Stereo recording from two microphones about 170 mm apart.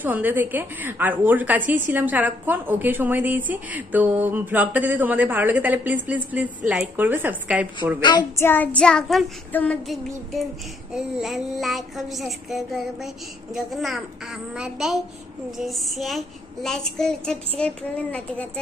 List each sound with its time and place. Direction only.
0.0 s a woman's voice: 10° right (ahead or behind)
8.0 s child singing: 25° left (ahead or behind)
8.4 s child singing: 10° left (ahead or behind)
17.6 s a woman's voice: 5° left (ahead or behind)